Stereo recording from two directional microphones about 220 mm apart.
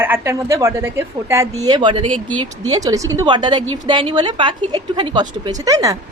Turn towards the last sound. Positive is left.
turn(degrees=-15)  # may be behind; listen again after turning